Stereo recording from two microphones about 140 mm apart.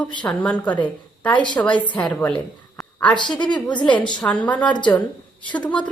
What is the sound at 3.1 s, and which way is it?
Speech, 35° left (ahead or behind).